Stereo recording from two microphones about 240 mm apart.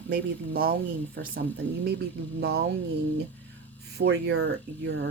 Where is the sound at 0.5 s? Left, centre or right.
Right.